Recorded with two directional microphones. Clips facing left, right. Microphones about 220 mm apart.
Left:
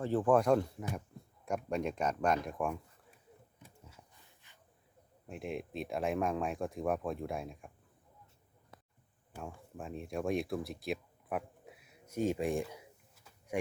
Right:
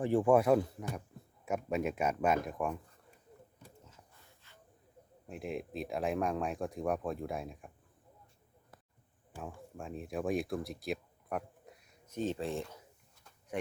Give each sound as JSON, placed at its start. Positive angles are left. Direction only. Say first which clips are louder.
{"t": 0.0, "sound": "speech", "louder": "right 2 dB", "side_deg": -15}
{"t": 4.4, "sound": "snake", "louder": "right 4 dB", "side_deg": 15}
{"t": 5.3, "sound": "speech", "louder": "right 1 dB", "side_deg": 0}
{"t": 9.3, "sound": "speech", "louder": "right 1 dB", "side_deg": 0}